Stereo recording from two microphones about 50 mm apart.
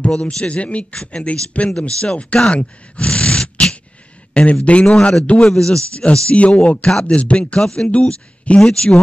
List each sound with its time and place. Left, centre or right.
0.1 s speech: centre
5.5 s speech: centre
6.1 s speech: left
6.9 s speech: centre
7.2 s speech: left